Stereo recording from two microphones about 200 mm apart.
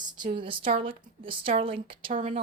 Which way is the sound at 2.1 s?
35° right (ahead or behind).